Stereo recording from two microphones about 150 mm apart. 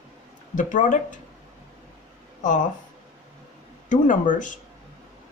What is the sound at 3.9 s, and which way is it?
Speech, 60° left (ahead or behind).